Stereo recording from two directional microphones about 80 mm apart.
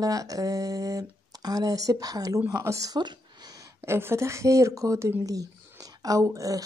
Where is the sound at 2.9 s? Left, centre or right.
Right.